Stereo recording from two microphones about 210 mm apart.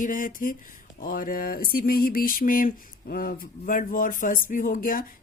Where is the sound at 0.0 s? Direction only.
40° left (ahead or behind).